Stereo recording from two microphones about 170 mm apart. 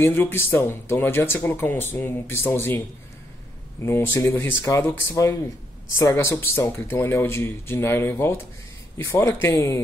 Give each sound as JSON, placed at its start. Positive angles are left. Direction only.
{"t": 0.0, "sound": "speech", "side_deg": 10}
{"t": 3.8, "sound": "a man's voice", "side_deg": 15}